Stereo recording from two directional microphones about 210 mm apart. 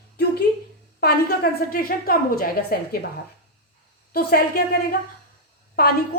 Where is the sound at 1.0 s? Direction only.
50° left (ahead or behind).